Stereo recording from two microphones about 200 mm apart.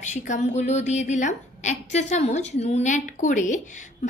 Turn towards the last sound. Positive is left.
turn(degrees=40)  # may be behind; listen again after turning